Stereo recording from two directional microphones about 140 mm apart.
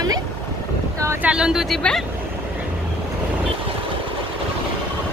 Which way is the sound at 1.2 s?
5° right (ahead or behind).